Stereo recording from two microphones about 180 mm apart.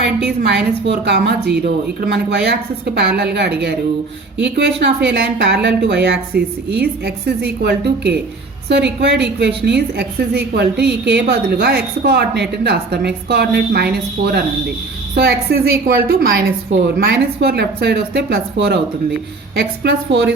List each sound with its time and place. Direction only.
0.0 s a woman's voice: 65° right (ahead or behind)
19.5 s a woman's voice: 75° right (ahead or behind)